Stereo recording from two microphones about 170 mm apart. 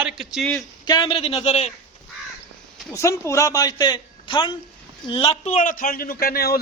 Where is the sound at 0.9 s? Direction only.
30° left (ahead or behind).